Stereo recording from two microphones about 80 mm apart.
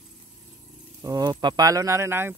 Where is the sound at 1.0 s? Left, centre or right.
Right.